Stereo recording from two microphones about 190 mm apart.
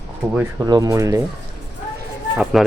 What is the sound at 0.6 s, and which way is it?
Speech, 20° right (ahead or behind).